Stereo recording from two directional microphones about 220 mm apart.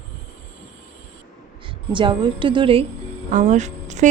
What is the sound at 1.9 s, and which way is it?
Speech, 20° right (ahead or behind).